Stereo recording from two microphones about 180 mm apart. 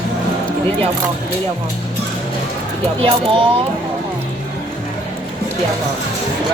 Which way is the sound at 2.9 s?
30° right (ahead or behind).